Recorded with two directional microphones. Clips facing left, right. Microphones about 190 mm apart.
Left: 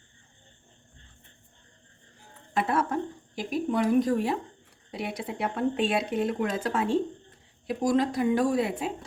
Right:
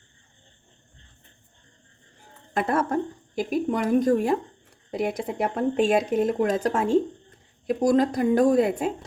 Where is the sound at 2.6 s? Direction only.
45° right (ahead or behind).